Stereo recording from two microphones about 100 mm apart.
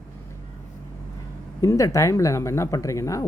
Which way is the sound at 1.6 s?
30° left (ahead or behind).